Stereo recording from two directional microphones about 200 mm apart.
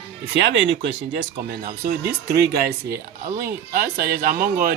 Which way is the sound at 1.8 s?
55° right (ahead or behind).